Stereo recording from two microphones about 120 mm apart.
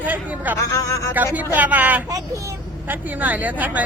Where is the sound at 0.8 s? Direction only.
25° left (ahead or behind).